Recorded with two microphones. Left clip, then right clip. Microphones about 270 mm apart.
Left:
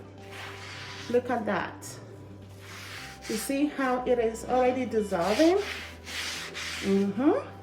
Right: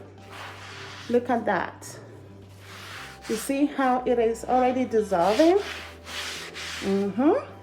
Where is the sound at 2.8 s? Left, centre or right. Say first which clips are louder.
Right 2 dB; centre.